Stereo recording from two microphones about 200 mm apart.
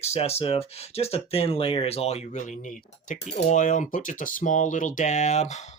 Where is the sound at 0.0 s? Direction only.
30° left (ahead or behind).